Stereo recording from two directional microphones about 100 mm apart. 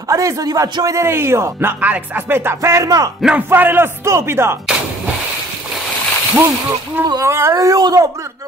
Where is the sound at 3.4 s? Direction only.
20° right (ahead or behind).